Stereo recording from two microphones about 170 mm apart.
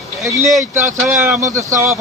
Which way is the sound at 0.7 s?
15° right (ahead or behind).